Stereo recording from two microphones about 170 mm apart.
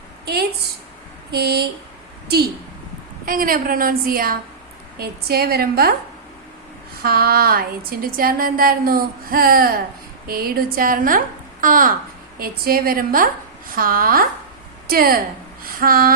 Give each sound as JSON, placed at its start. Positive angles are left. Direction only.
{"t": 1.3, "sound": "speech", "side_deg": -65}
{"t": 3.2, "sound": "speech", "side_deg": -55}
{"t": 7.0, "sound": "a woman's voice", "side_deg": -65}
{"t": 15.6, "sound": "a sound", "side_deg": -60}